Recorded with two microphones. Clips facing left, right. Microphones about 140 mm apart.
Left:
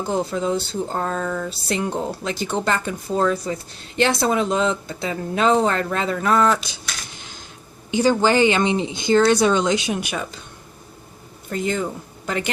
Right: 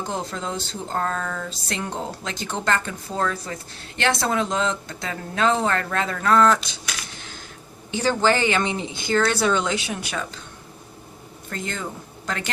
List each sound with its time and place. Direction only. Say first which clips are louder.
0.0 s speech: left 6 dB; 10° left (ahead or behind)
7.2 s a sound: right 1 dB; 15° left (ahead or behind)
7.9 s speech: left 3 dB; 15° left (ahead or behind)
11.4 s speech: left 7 dB; 15° left (ahead or behind)